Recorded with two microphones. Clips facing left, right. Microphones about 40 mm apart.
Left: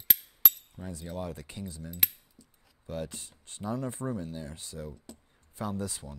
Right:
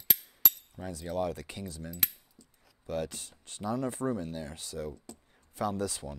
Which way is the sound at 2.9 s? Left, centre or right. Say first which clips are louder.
Right 3 dB; centre.